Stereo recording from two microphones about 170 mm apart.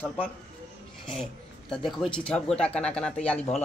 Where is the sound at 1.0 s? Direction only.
5° left (ahead or behind).